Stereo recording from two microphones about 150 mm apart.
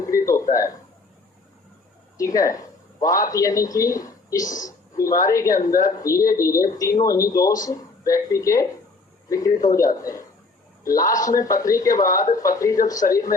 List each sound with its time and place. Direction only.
0.2 s a sound: 20° left (ahead or behind)
2.1 s speech: 25° left (ahead or behind)
4.4 s speech: 60° left (ahead or behind)
4.9 s speech: 25° left (ahead or behind)
5.5 s speech: 60° left (ahead or behind)
5.8 s speech: 20° left (ahead or behind)